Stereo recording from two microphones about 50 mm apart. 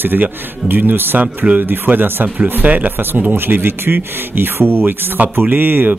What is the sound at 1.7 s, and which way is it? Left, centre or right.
Speech, right.